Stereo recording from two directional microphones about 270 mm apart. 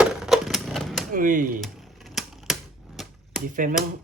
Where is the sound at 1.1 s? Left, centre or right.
Right.